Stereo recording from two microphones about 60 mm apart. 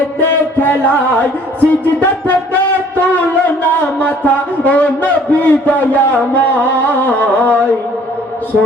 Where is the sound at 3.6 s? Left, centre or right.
Left.